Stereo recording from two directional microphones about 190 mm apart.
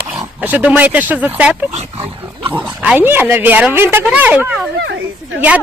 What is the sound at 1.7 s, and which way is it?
Speech, 35° right (ahead or behind).